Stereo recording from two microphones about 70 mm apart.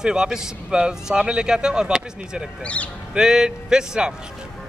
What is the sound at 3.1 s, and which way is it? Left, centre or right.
Speech, centre.